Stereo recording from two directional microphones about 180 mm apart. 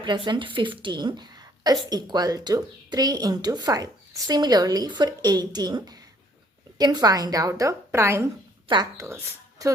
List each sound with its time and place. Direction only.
0.0 s a woman's voice: 25° right (ahead or behind)
8.6 s speech: 25° right (ahead or behind)